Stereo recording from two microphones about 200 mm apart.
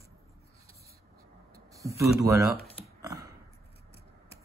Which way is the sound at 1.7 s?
15° right (ahead or behind).